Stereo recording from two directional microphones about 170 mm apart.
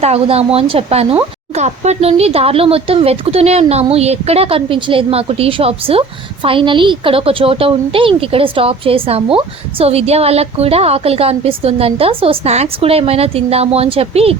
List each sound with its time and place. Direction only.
0.0 s speech: 35° right (ahead or behind)